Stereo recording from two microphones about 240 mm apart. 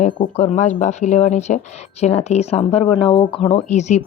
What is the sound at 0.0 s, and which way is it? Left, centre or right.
Speech, left.